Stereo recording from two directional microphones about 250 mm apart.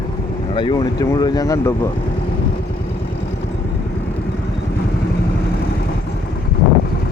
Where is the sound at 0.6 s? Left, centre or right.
Centre.